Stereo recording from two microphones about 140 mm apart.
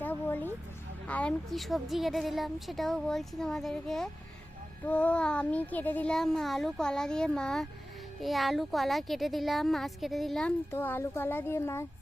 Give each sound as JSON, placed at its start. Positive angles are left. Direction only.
{"t": 0.0, "sound": "a sound", "side_deg": 15}
{"t": 1.0, "sound": "a woman's voice", "side_deg": 10}
{"t": 10.7, "sound": "speech", "side_deg": 15}